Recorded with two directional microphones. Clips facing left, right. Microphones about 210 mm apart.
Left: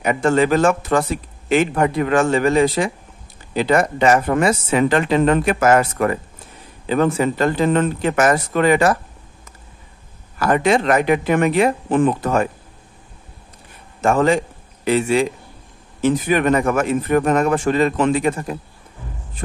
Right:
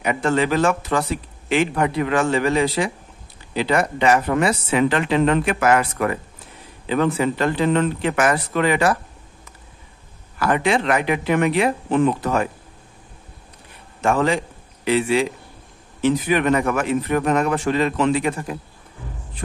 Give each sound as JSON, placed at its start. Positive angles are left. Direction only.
{"t": 0.0, "sound": "speech", "side_deg": 45}
{"t": 10.4, "sound": "speech", "side_deg": 40}
{"t": 14.0, "sound": "speech", "side_deg": 45}